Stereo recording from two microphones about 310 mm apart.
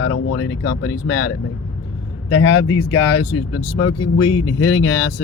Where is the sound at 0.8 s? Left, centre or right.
Left.